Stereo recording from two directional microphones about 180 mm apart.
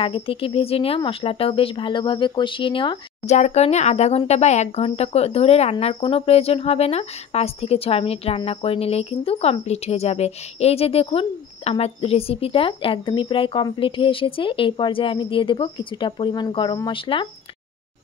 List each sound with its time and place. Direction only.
0.0 s speech: 30° left (ahead or behind)
3.3 s speech: 40° left (ahead or behind)